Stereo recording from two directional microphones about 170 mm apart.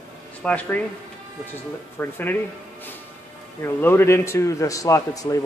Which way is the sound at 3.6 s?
15° left (ahead or behind).